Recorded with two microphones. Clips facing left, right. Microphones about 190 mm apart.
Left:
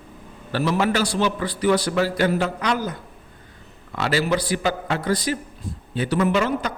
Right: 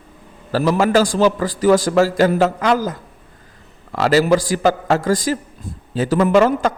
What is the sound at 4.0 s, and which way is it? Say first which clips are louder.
A man's voice: right 7 dB; 45° right (ahead or behind).